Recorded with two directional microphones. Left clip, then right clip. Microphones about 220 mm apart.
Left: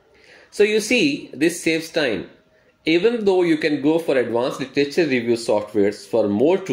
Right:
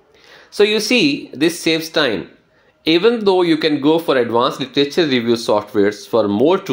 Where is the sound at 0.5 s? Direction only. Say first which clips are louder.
Right 3 dB; 5° right (ahead or behind).